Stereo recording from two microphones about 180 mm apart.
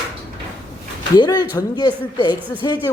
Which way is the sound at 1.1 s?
20° left (ahead or behind).